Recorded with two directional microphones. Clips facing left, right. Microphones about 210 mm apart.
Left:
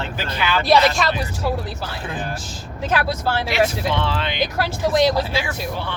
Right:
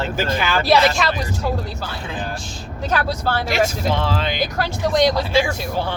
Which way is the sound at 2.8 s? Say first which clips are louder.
Even; 5° left (ahead or behind).